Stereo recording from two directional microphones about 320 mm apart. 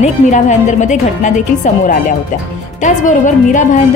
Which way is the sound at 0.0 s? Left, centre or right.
Left.